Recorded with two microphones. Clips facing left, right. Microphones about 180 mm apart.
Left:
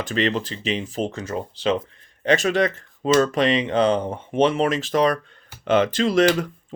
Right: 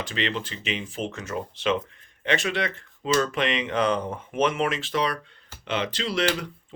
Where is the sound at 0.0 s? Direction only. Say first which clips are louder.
Left 6 dB; 45° left (ahead or behind).